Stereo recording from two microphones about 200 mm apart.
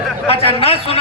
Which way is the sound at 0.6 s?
30° left (ahead or behind).